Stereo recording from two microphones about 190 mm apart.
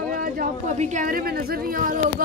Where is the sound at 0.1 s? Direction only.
45° right (ahead or behind).